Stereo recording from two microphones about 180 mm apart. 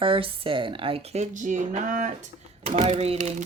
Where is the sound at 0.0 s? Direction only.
30° right (ahead or behind).